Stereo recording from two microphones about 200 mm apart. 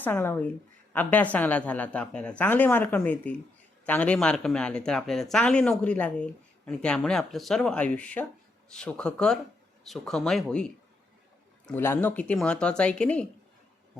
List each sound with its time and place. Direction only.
0.0 s a woman's voice: 10° left (ahead or behind)